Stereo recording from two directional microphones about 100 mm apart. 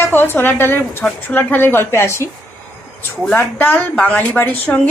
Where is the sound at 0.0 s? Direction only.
25° left (ahead or behind).